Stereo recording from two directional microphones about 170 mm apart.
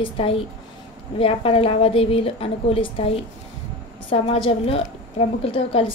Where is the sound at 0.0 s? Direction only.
35° left (ahead or behind).